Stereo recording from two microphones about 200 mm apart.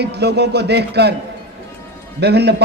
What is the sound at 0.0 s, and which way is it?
A man's voice, 55° right (ahead or behind).